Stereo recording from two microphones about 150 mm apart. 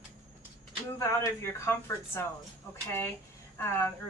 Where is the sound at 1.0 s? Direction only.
20° left (ahead or behind).